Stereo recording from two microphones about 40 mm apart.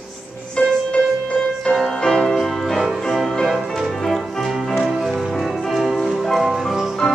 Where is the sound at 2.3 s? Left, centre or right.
Centre.